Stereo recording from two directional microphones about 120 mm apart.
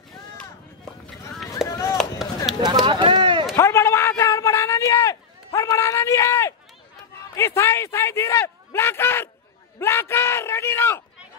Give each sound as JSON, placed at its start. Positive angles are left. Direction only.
{"t": 1.7, "sound": "chop", "side_deg": 25}
{"t": 2.0, "sound": "chop", "side_deg": 0}
{"t": 2.6, "sound": "run", "side_deg": -35}
{"t": 3.5, "sound": "a sound", "side_deg": 25}
{"t": 7.3, "sound": "speech", "side_deg": 25}
{"t": 9.8, "sound": "a sound", "side_deg": 20}